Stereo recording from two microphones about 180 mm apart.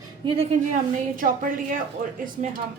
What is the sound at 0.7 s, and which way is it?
A woman's voice, 50° right (ahead or behind).